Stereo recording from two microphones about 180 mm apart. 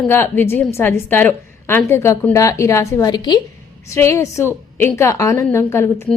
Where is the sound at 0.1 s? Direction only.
10° left (ahead or behind).